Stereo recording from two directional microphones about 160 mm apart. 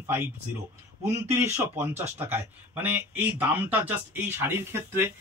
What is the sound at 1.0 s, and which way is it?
A man's voice, 15° right (ahead or behind).